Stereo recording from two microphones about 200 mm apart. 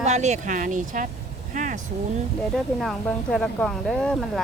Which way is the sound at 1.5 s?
40° right (ahead or behind).